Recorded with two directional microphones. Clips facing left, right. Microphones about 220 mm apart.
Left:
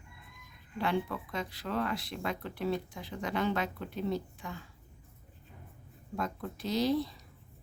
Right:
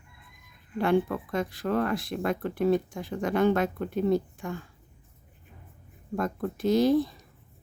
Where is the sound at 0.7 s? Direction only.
50° right (ahead or behind).